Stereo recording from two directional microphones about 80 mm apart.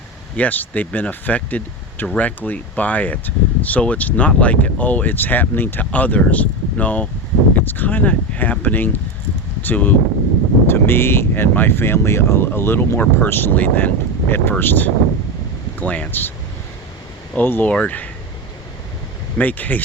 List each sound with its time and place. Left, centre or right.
0.3 s speech: left
17.3 s speech: left
19.4 s speech: left